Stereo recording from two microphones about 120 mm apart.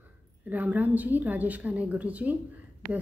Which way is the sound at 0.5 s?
15° right (ahead or behind).